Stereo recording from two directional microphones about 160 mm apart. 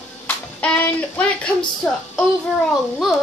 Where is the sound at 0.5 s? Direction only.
10° left (ahead or behind).